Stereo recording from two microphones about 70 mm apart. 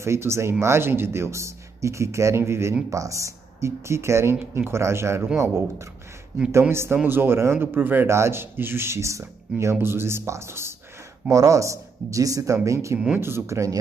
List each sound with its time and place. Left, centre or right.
0.0 s speech: right
2.9 s speech: right
6.3 s speech: right
11.2 s speech: right
13.2 s speech: right